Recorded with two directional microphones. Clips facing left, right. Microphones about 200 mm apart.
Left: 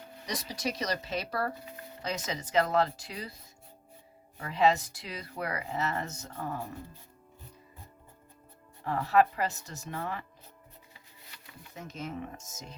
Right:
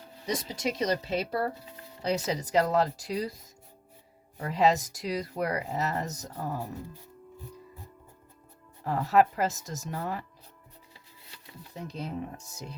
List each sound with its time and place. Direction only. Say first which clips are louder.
0.3 s speech: right 4 dB; 25° right (ahead or behind)
8.8 s speech: right 2 dB; 40° right (ahead or behind)
11.3 s speech: right 4 dB; 35° right (ahead or behind)